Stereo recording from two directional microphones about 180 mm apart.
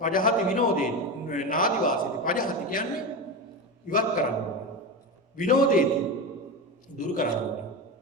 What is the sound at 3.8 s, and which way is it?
Speech, 50° left (ahead or behind).